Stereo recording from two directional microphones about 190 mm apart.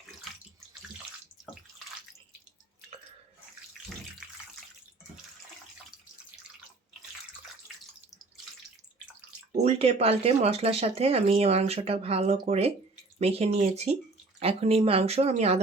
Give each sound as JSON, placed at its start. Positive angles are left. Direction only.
{"t": 9.5, "sound": "speech", "side_deg": -35}